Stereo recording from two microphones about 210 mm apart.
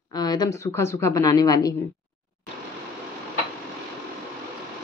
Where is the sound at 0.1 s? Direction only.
20° left (ahead or behind).